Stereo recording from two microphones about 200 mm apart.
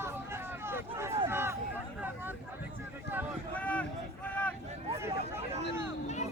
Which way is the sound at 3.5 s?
5° left (ahead or behind).